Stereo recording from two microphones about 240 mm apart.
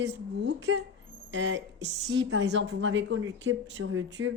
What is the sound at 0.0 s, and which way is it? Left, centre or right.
A woman's voice, right.